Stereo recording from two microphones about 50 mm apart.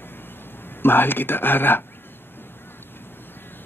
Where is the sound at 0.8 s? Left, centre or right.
Left.